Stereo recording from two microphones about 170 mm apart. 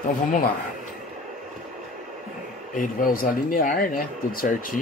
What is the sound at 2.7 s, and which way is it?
Speech, 55° left (ahead or behind).